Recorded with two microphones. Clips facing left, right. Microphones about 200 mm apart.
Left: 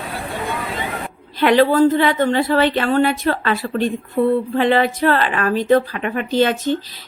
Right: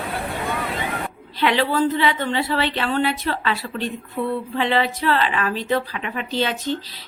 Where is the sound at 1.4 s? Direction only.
50° left (ahead or behind).